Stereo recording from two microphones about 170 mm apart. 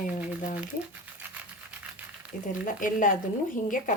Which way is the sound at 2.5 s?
50° left (ahead or behind).